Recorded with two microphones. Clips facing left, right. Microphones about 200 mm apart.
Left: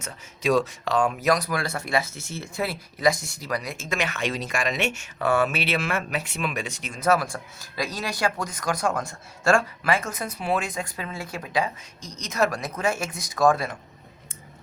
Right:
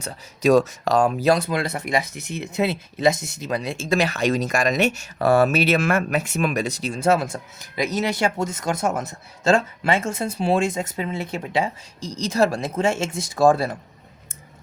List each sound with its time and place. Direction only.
0.0 s speech: 40° right (ahead or behind)